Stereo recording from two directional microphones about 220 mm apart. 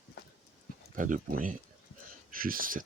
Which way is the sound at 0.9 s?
35° right (ahead or behind).